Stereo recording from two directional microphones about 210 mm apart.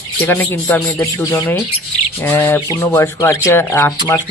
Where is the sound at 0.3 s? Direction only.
10° left (ahead or behind).